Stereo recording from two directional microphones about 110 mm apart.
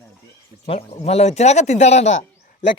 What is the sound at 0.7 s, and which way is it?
Speech, 70° left (ahead or behind).